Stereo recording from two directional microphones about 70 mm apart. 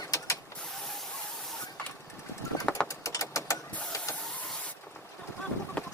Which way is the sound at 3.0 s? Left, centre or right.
Left.